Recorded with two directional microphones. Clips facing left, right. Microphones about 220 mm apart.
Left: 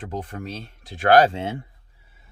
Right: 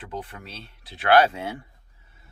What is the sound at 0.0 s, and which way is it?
Speech, 45° left (ahead or behind).